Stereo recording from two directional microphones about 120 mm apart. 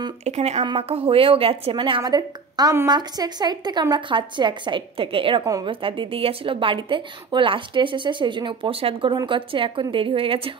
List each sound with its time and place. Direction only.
0.2 s speech: 65° right (ahead or behind)
0.7 s a woman's voice: 55° right (ahead or behind)
5.4 s a woman's voice: 30° right (ahead or behind)
5.7 s speech: 45° right (ahead or behind)